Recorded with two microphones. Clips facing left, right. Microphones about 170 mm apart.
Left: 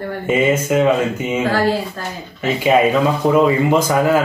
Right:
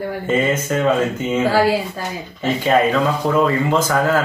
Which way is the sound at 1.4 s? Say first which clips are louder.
Right 2 dB; 10° right (ahead or behind).